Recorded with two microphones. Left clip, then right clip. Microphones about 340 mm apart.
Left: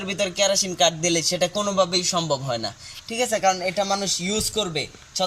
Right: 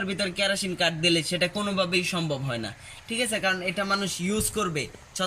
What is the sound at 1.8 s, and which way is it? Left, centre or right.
Speech, centre.